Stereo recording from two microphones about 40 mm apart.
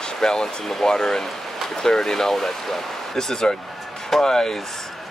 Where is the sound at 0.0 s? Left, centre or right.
Centre.